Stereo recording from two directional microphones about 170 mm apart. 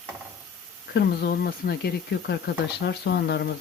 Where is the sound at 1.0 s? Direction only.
70° left (ahead or behind).